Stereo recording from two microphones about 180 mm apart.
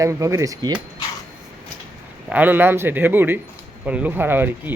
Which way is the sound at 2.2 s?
10° right (ahead or behind).